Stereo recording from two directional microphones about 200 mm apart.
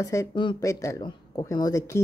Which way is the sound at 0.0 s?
15° left (ahead or behind).